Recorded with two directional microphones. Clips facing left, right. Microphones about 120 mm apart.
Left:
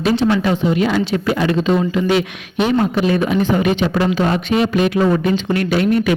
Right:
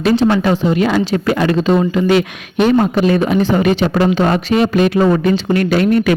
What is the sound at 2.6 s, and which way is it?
A man's voice, 45° right (ahead or behind).